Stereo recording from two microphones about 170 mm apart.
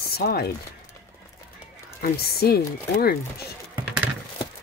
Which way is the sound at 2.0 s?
65° left (ahead or behind).